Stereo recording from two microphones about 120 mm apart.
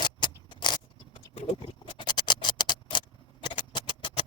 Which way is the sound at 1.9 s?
40° left (ahead or behind).